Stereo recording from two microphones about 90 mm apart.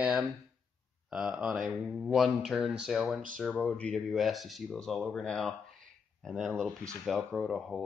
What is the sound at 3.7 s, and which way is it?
Speech, 15° left (ahead or behind).